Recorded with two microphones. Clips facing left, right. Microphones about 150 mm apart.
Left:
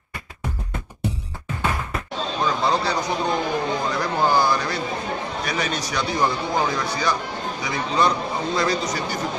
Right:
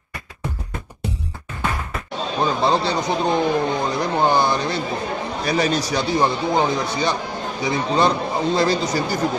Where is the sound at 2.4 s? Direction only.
25° right (ahead or behind).